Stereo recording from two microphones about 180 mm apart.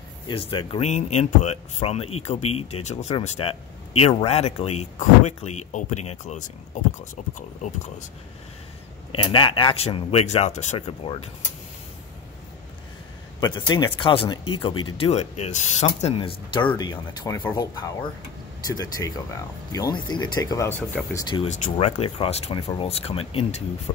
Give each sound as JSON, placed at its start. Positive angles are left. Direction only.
{"t": 0.3, "sound": "speech", "side_deg": 30}
{"t": 9.1, "sound": "speech", "side_deg": 30}
{"t": 13.4, "sound": "speech", "side_deg": 20}
{"t": 21.5, "sound": "speech", "side_deg": 40}